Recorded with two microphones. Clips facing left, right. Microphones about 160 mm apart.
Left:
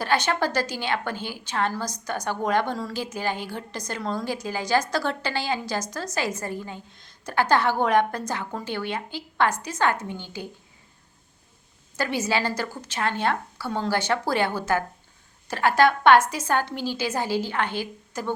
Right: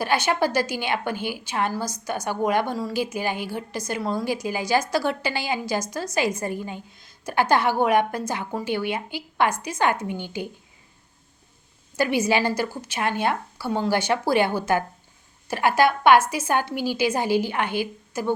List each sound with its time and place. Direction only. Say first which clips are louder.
0.0 s a woman's voice: right 2 dB; 10° right (ahead or behind)
11.9 s a woman's voice: right 4 dB; 15° right (ahead or behind)